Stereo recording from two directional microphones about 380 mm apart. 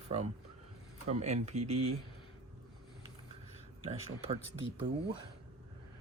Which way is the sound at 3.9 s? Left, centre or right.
Centre.